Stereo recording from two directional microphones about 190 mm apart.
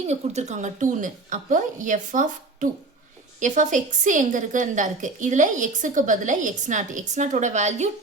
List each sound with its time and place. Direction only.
0.1 s a woman's voice: 35° right (ahead or behind)